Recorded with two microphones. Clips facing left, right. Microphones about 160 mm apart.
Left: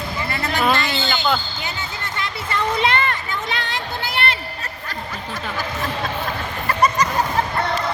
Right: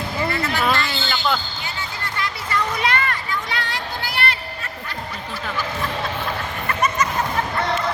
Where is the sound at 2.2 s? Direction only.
25° left (ahead or behind).